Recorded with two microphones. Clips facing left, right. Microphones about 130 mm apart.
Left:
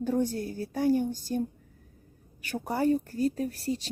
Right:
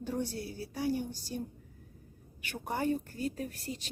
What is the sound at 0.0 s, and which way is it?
A woman's voice, 45° left (ahead or behind).